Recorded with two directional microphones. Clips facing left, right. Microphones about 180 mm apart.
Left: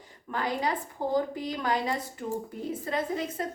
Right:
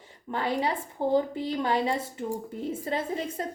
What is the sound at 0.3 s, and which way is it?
A woman's voice, 25° right (ahead or behind).